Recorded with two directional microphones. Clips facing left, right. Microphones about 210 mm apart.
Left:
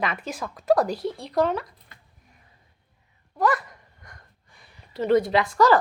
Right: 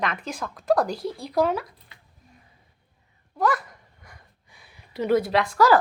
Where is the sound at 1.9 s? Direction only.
50° left (ahead or behind).